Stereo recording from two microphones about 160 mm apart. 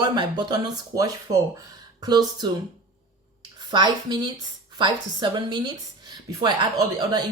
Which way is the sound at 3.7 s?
25° right (ahead or behind).